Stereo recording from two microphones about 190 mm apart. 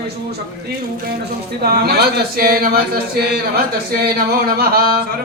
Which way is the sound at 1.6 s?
55° right (ahead or behind).